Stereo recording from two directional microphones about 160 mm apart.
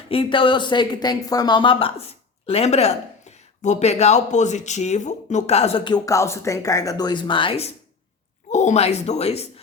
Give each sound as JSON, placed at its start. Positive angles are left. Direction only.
{"t": 0.1, "sound": "a woman's voice", "side_deg": 35}
{"t": 8.4, "sound": "speech", "side_deg": 50}